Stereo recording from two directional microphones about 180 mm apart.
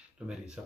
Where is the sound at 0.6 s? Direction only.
5° right (ahead or behind).